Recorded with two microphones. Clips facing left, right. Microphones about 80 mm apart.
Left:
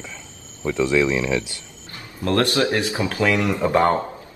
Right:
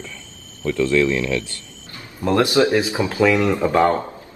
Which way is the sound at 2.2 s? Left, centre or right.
Centre.